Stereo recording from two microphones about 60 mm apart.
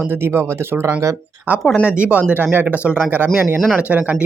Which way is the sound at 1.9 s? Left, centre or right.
Right.